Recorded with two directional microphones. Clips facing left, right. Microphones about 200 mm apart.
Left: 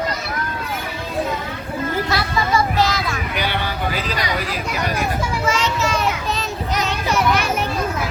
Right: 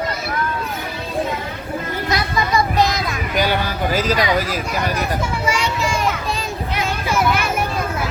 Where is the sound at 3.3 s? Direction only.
40° right (ahead or behind).